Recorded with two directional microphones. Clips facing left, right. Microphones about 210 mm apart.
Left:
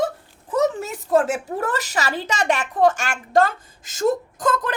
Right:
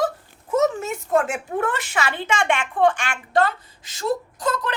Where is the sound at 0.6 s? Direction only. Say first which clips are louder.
Even; 35° left (ahead or behind).